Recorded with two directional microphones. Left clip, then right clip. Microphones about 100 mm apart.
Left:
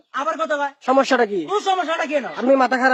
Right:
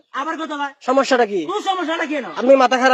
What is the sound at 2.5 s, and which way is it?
Speech, 5° left (ahead or behind).